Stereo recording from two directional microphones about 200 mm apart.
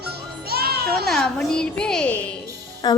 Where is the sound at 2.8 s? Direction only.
20° left (ahead or behind).